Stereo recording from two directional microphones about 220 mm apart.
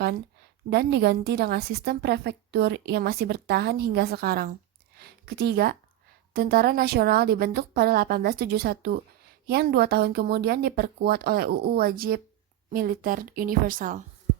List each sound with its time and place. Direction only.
0.7 s a woman's voice: 50° right (ahead or behind)